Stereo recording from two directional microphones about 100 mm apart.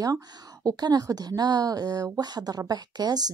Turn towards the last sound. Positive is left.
turn(degrees=-45)  # may be behind; listen again after turning